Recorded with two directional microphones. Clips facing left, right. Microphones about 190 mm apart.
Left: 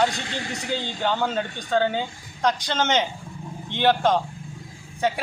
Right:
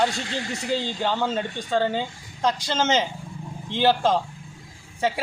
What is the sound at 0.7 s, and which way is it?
A man's voice, centre (ahead or behind).